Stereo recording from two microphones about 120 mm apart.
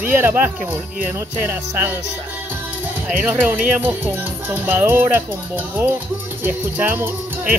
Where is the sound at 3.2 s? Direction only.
15° right (ahead or behind).